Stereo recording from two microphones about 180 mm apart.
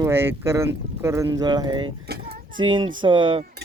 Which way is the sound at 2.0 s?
60° right (ahead or behind).